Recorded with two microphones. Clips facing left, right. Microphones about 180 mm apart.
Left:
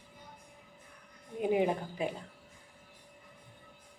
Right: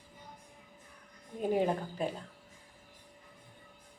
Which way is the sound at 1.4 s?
15° left (ahead or behind).